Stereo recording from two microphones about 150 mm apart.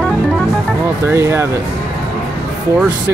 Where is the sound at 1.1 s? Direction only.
15° right (ahead or behind).